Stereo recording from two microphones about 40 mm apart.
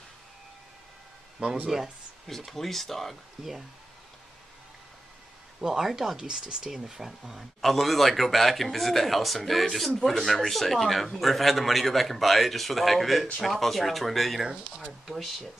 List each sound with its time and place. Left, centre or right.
1.7 s speech: centre
2.2 s a man's voice: centre
5.6 s a man's voice: centre
14.4 s speech: centre
15.0 s a man's voice: centre